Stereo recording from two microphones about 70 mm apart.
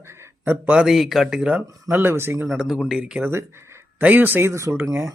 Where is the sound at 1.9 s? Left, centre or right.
Right.